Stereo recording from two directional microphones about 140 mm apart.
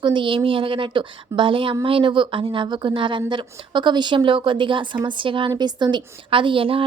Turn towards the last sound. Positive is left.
turn(degrees=-40)  # may be behind; listen again after turning